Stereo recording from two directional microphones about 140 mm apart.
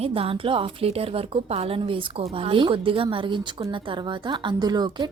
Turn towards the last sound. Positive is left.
turn(degrees=-30)  # may be behind; listen again after turning